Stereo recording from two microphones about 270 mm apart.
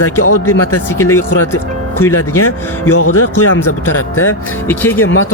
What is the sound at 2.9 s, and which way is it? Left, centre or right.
Speech, left.